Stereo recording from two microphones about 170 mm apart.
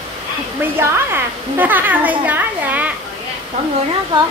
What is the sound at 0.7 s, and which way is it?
A child's voice, 15° right (ahead or behind).